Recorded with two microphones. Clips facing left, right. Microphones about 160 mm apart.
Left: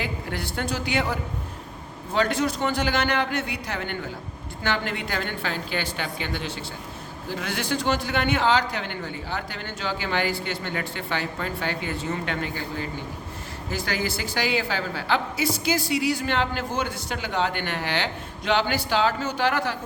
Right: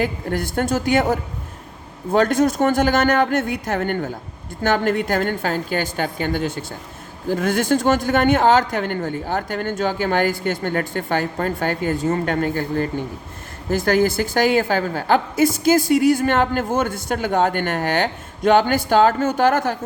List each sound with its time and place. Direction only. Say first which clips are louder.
0.0 s a woman's voice: right 8 dB; 45° right (ahead or behind)